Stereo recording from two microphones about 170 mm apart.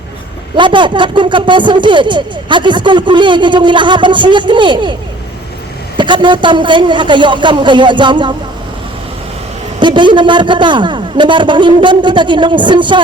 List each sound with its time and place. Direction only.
0.5 s a woman's voice: 30° right (ahead or behind)
6.0 s a woman's voice: 25° right (ahead or behind)
9.8 s a woman's voice: 30° right (ahead or behind)